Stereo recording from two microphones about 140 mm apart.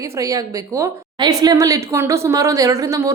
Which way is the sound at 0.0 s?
20° right (ahead or behind).